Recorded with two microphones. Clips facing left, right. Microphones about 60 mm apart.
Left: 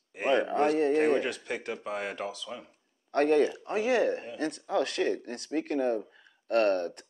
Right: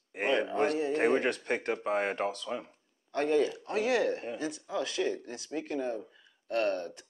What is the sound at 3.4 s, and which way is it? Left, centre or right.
Speech, left.